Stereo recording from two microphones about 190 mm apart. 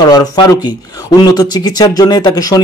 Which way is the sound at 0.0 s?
20° left (ahead or behind).